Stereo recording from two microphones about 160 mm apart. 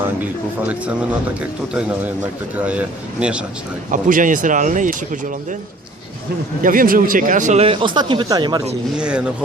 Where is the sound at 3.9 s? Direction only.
55° right (ahead or behind).